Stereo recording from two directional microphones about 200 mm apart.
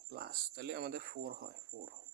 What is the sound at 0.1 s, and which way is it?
A man's voice, 50° right (ahead or behind).